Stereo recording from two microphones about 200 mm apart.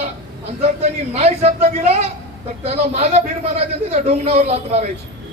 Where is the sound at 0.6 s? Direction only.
30° right (ahead or behind).